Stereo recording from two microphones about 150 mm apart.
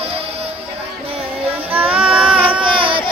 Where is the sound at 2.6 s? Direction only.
35° right (ahead or behind).